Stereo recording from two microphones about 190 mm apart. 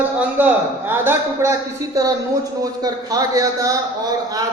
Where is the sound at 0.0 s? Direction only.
10° right (ahead or behind).